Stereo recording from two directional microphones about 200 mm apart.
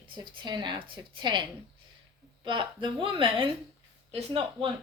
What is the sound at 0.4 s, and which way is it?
Speech, 20° right (ahead or behind).